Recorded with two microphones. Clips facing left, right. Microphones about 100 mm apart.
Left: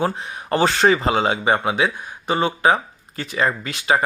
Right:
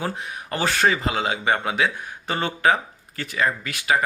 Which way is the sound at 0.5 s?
30° left (ahead or behind).